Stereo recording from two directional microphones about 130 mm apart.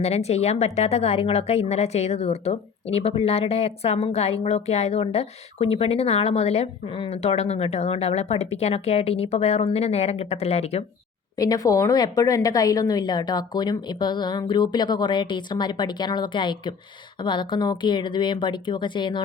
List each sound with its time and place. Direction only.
0.0 s a woman's voice: 55° left (ahead or behind)
11.3 s a woman's voice: 30° left (ahead or behind)